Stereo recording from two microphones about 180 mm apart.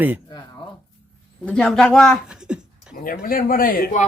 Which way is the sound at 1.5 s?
5° left (ahead or behind).